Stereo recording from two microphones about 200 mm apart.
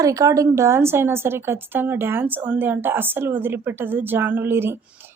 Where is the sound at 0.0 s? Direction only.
15° right (ahead or behind).